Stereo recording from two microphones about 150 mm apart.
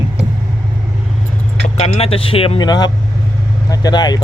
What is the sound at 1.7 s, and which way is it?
Speech, 45° left (ahead or behind).